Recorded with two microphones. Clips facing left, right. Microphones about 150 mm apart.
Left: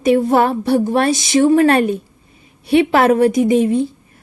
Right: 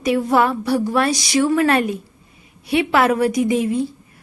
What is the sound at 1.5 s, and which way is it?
A woman's voice, 35° left (ahead or behind).